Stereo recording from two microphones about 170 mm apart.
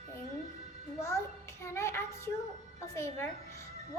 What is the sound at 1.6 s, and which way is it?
A woman's voice, 15° left (ahead or behind).